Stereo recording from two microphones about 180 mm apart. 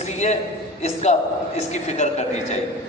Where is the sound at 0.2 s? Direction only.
40° left (ahead or behind).